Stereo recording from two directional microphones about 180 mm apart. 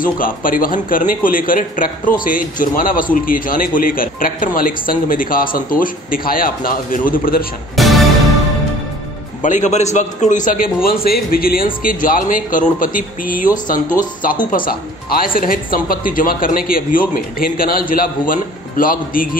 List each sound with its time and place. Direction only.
0.0 s a man's voice: 50° left (ahead or behind)
7.7 s music: centre (ahead or behind)
9.4 s a man's voice: 45° left (ahead or behind)